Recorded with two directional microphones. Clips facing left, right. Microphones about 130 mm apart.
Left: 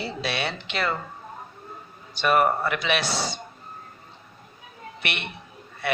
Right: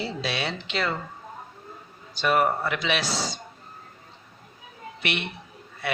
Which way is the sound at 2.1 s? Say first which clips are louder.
Left 2 dB; 55° left (ahead or behind).